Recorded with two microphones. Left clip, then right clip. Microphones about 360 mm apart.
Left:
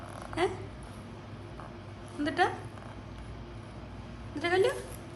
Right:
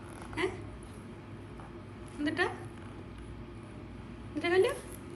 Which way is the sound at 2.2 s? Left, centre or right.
Centre.